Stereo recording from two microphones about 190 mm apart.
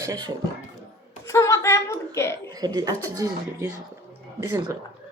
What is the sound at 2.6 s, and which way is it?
Speech, 20° right (ahead or behind).